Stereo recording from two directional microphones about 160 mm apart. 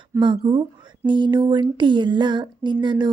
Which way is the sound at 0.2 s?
30° right (ahead or behind).